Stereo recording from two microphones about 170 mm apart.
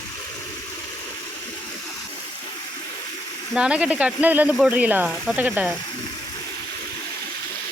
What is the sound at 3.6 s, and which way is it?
Speech, 5° right (ahead or behind).